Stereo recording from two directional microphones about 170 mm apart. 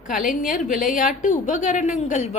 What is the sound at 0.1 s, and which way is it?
A woman's voice, 55° left (ahead or behind).